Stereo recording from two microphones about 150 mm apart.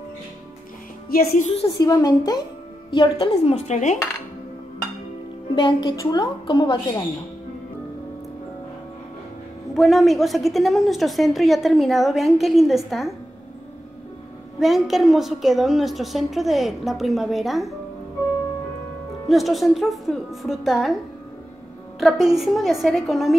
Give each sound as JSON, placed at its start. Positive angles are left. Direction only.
{"t": 1.3, "sound": "speech", "side_deg": 45}
{"t": 1.8, "sound": "a woman's voice", "side_deg": 25}
{"t": 2.9, "sound": "speech", "side_deg": 35}
{"t": 5.6, "sound": "a woman's voice", "side_deg": 35}
{"t": 9.8, "sound": "a woman's voice", "side_deg": 0}
{"t": 14.6, "sound": "a woman's voice", "side_deg": 0}
{"t": 19.2, "sound": "a woman's voice", "side_deg": 0}
{"t": 22.0, "sound": "a woman's voice", "side_deg": 0}